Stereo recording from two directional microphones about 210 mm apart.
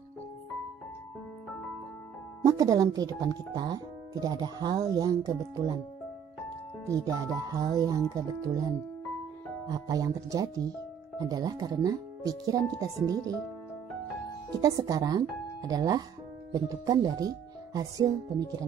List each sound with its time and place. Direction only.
2.4 s speech: 15° right (ahead or behind)
6.9 s speech: 15° right (ahead or behind)
14.6 s speech: 15° right (ahead or behind)